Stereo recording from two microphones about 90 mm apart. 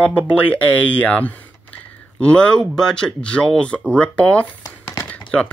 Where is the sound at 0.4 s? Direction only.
15° left (ahead or behind).